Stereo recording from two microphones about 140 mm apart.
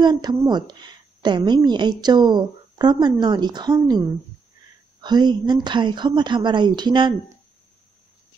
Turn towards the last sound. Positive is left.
turn(degrees=-35)  # may be behind; listen again after turning